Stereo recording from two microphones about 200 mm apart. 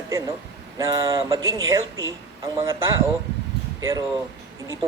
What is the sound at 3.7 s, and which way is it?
Speech, 20° right (ahead or behind).